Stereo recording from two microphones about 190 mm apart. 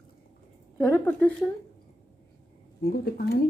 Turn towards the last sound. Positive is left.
turn(degrees=55)  # may be behind; listen again after turning